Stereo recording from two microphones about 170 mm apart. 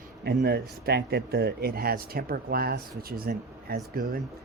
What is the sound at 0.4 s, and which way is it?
Speech, 65° right (ahead or behind).